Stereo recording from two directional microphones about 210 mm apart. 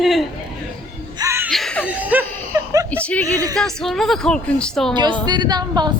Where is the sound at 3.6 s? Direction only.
Centre (ahead or behind).